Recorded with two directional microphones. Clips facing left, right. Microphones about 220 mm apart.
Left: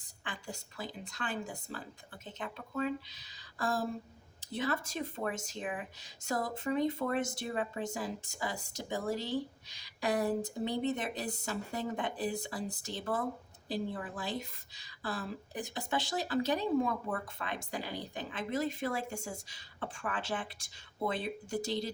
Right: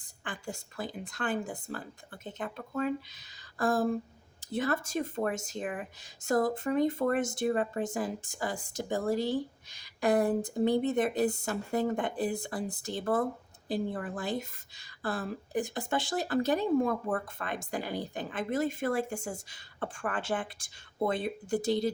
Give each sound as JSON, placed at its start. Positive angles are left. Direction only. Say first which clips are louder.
{"t": 0.3, "sound": "speech", "louder": "right 4 dB", "side_deg": -50}